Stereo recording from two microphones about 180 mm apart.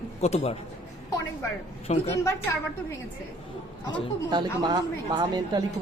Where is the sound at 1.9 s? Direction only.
35° left (ahead or behind).